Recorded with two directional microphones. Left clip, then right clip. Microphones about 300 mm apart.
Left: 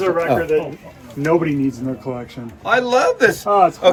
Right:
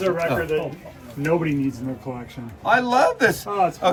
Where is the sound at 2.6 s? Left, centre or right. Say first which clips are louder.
Left 2 dB; centre.